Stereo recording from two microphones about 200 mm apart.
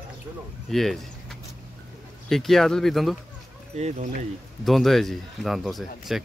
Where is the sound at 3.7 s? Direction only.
35° right (ahead or behind).